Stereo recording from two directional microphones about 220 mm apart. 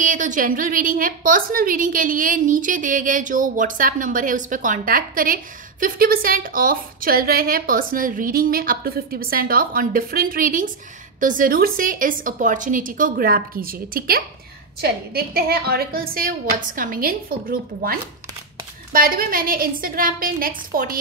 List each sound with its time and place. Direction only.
0.0 s a woman's voice: 35° right (ahead or behind)